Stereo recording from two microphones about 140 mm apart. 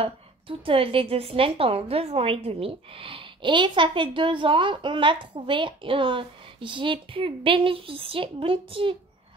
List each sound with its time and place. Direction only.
0.0 s a woman's voice: 40° right (ahead or behind)